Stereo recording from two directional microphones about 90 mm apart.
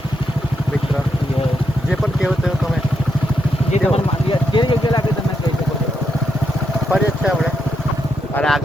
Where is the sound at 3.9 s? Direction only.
70° left (ahead or behind).